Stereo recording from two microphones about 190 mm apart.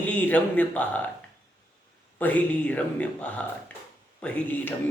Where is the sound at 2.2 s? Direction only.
10° left (ahead or behind).